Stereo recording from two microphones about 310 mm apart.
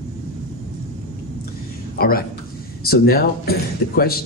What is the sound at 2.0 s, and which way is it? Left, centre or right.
A man's voice, left.